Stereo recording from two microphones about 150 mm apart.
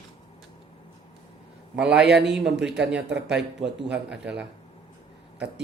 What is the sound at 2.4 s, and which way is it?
Speech, 5° right (ahead or behind).